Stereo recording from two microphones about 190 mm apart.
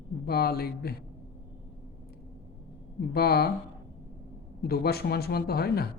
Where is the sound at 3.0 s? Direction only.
55° left (ahead or behind).